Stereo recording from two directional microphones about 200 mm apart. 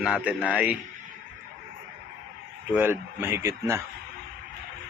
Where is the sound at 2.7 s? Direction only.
10° right (ahead or behind).